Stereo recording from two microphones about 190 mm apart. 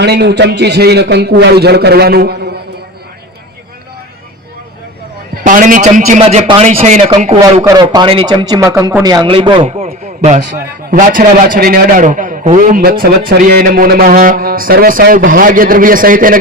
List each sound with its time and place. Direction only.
0.0 s a man's voice: 60° right (ahead or behind)
5.3 s a man's voice: 45° right (ahead or behind)
7.6 s speech: 20° right (ahead or behind)
9.0 s a man's voice: 20° right (ahead or behind); by 16.4 s 45° right (ahead or behind)